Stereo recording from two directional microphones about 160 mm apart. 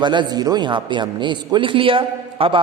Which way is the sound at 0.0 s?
30° right (ahead or behind).